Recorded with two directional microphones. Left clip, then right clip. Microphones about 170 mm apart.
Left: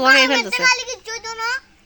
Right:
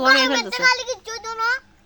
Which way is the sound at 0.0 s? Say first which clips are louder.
Left 3 dB; 10° left (ahead or behind).